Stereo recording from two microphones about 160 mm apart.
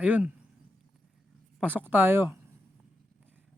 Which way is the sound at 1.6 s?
10° right (ahead or behind).